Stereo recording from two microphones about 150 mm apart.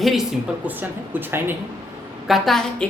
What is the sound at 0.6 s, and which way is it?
Speech, 10° right (ahead or behind).